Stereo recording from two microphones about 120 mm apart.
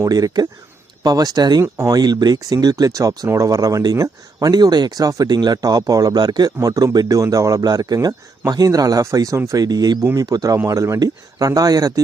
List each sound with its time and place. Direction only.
0.0 s speech: 30° right (ahead or behind)